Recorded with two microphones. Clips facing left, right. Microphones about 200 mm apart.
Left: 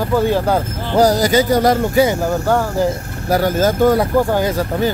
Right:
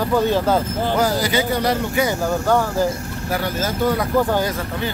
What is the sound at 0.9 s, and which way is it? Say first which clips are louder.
Speech: left 8 dB; 40° left (ahead or behind).